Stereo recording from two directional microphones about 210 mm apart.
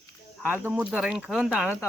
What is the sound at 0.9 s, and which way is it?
Speech, 5° right (ahead or behind).